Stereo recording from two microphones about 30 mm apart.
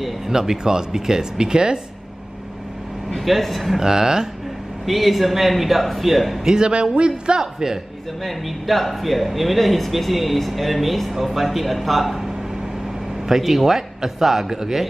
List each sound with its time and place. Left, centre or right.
0.3 s speech: centre
3.2 s speech: centre
3.7 s speech: centre
4.8 s speech: centre
6.4 s speech: right
8.2 s speech: centre
13.3 s speech: centre